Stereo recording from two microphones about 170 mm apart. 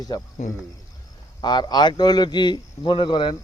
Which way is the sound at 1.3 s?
25° left (ahead or behind).